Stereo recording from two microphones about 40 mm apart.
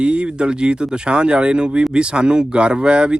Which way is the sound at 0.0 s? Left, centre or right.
Right.